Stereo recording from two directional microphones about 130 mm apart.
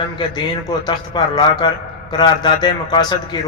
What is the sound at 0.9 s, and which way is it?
A man's voice, 35° left (ahead or behind).